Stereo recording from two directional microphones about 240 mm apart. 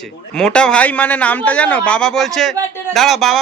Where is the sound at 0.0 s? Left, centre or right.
Centre.